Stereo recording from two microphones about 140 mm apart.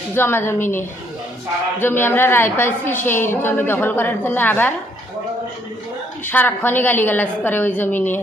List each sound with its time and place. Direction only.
0.1 s a woman's voice: 15° left (ahead or behind)
6.2 s a woman's voice: 15° left (ahead or behind)